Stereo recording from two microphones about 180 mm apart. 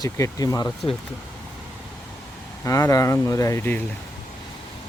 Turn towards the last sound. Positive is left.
turn(degrees=10)  # may be behind; listen again after turning